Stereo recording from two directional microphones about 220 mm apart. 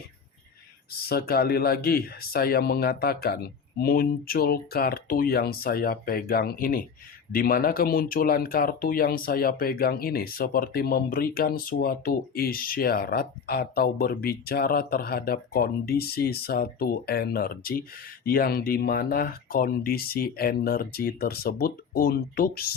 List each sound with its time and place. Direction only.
0.9 s speech: 45° left (ahead or behind)